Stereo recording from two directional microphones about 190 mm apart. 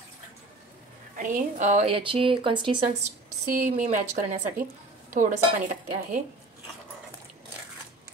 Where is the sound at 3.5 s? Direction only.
40° right (ahead or behind).